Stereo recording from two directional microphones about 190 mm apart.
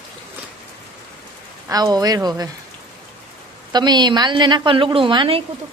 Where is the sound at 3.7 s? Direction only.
20° right (ahead or behind).